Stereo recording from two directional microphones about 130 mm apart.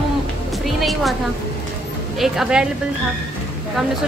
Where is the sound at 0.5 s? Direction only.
Centre (ahead or behind).